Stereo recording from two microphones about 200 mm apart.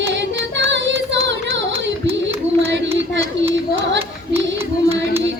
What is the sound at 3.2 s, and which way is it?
Hands, 65° right (ahead or behind).